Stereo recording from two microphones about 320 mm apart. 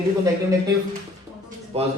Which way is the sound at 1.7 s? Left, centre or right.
Centre.